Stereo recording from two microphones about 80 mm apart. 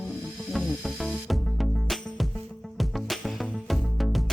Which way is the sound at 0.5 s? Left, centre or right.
Centre.